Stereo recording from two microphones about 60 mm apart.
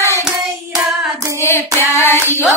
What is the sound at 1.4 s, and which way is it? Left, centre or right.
Hands, left.